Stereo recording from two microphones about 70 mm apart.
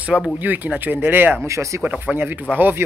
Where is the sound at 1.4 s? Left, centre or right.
Right.